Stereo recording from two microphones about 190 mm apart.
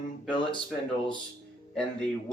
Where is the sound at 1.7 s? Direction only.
5° left (ahead or behind).